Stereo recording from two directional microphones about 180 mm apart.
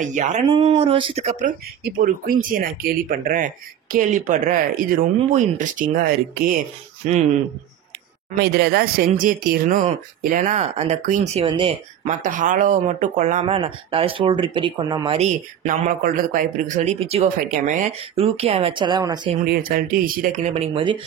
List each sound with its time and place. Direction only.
0.0 s speech: 40° right (ahead or behind)
8.4 s speech: 60° right (ahead or behind); by 11.7 s 30° right (ahead or behind)
12.1 s speech: 45° right (ahead or behind)
13.6 s speech: 30° right (ahead or behind)
15.1 s speech: 40° right (ahead or behind)
17.6 s speech: 45° right (ahead or behind)
18.1 s speech: 35° right (ahead or behind)
19.4 s speech: 55° right (ahead or behind); by 21.0 s 30° right (ahead or behind)